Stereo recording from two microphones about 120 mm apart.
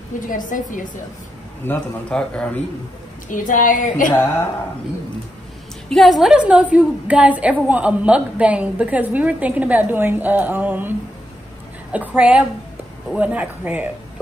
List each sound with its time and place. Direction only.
0.3 s a woman's voice: 90° left
1.6 s a man's voice: 10° left (ahead or behind)
3.3 s a woman's voice: 90° left
5.9 s a woman's voice: centre (ahead or behind)